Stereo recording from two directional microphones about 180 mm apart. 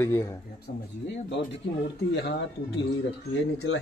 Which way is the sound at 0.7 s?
55° left (ahead or behind).